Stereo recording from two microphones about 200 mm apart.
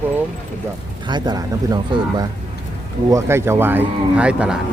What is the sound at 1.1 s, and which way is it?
Speech, 20° right (ahead or behind).